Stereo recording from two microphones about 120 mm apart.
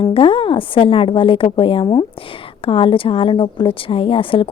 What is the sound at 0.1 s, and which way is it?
A woman's voice, 45° left (ahead or behind).